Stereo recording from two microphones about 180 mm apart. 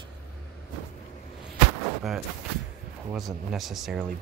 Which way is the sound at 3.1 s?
Centre (ahead or behind).